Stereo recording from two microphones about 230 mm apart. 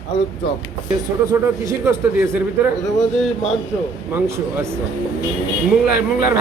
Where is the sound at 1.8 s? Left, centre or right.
Centre.